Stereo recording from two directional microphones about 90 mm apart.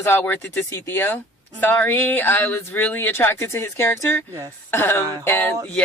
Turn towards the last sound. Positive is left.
turn(degrees=25)  # may be behind; listen again after turning